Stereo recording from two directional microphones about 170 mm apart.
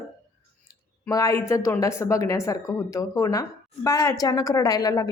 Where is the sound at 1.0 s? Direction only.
20° left (ahead or behind).